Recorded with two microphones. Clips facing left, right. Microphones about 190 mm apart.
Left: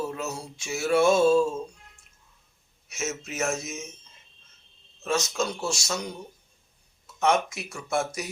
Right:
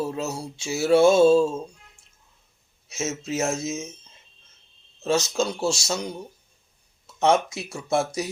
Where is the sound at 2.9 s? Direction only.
25° right (ahead or behind).